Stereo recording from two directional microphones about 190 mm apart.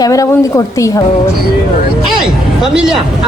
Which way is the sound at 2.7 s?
5° right (ahead or behind).